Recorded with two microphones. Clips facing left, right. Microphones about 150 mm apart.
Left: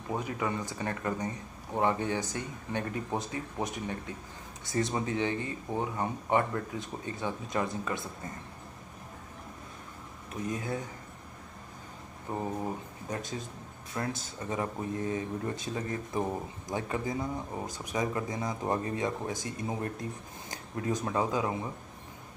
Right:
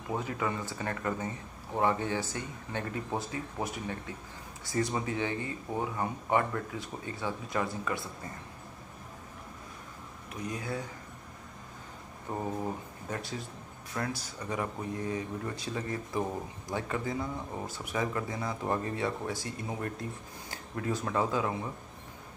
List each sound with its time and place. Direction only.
0.1 s speech: 20° left (ahead or behind)
10.4 s speech: 25° left (ahead or behind)
12.3 s speech: 15° left (ahead or behind)